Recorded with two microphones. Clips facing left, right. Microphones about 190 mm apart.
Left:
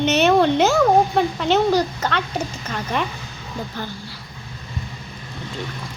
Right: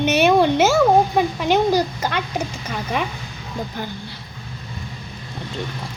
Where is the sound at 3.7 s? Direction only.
15° right (ahead or behind).